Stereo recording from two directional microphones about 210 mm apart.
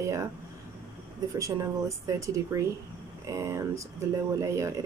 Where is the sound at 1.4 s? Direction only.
15° right (ahead or behind).